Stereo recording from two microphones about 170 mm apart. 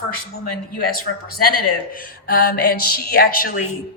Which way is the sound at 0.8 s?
60° left (ahead or behind).